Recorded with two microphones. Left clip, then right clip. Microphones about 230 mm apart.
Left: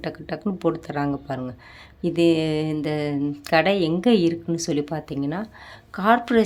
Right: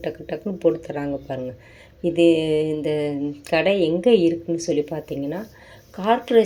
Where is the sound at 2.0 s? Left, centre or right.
Left.